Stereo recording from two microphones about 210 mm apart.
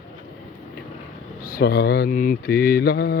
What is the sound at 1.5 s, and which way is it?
Mantra, 45° left (ahead or behind).